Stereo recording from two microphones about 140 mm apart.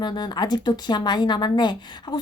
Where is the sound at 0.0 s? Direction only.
30° left (ahead or behind).